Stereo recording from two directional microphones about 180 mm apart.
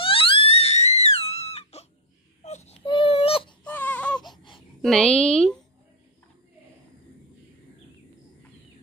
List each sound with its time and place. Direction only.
0.0 s crying: 30° left (ahead or behind)
2.4 s baby cry: 40° left (ahead or behind)
3.6 s baby cry: 10° left (ahead or behind)
4.8 s a woman's voice: 5° left (ahead or behind)